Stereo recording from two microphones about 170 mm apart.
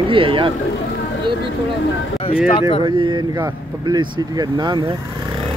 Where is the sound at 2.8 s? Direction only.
25° right (ahead or behind).